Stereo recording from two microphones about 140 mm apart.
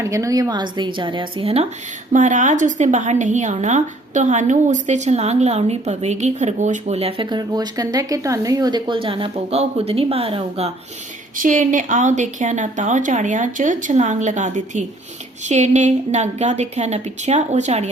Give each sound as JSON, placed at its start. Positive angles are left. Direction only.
{"t": 0.0, "sound": "speech", "side_deg": -20}
{"t": 2.1, "sound": "a woman's voice", "side_deg": -65}
{"t": 7.3, "sound": "speech", "side_deg": -30}
{"t": 11.3, "sound": "a woman's voice", "side_deg": -70}